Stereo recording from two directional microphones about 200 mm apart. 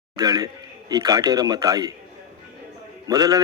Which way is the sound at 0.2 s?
20° right (ahead or behind).